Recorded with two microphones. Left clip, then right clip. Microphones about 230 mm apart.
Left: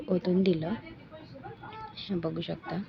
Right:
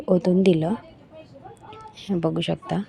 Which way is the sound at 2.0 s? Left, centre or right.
Right.